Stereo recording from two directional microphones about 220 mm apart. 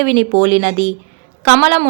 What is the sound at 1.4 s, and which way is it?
Speech, 35° right (ahead or behind).